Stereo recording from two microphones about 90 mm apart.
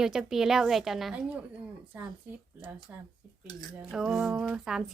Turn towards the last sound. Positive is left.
turn(degrees=-5)  # may be behind; listen again after turning